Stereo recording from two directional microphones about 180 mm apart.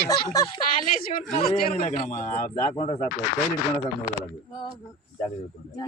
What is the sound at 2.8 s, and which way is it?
Speech, 40° left (ahead or behind).